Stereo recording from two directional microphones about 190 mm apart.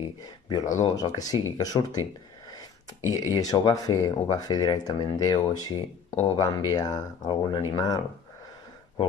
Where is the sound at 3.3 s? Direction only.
20° left (ahead or behind).